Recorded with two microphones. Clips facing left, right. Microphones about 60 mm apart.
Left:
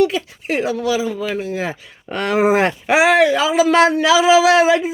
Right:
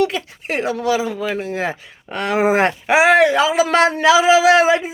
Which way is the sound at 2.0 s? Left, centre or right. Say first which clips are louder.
Left 1 dB; centre.